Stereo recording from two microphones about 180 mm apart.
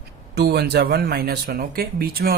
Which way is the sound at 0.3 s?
65° right (ahead or behind).